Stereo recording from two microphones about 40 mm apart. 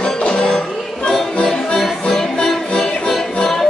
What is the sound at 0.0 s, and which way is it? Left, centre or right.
Music, left.